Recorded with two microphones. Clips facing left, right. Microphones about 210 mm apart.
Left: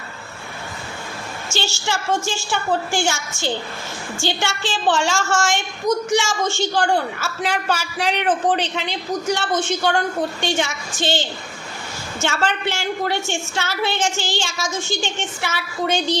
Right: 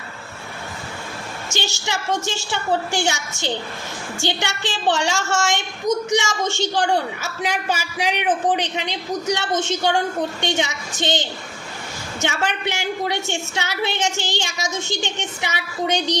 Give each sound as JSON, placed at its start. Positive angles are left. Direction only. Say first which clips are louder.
{"t": 1.5, "sound": "a woman's voice", "louder": "left 2 dB", "side_deg": -20}